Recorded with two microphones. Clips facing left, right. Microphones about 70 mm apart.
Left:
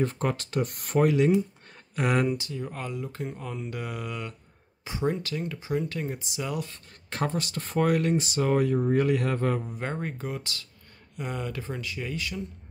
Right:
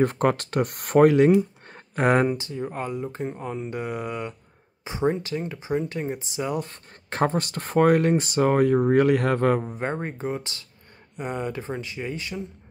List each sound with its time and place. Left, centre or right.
0.0 s speech: right
6.7 s speech: right
9.6 s speech: right